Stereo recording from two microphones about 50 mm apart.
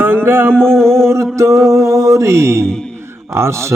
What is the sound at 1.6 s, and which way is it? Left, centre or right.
Mantra, right.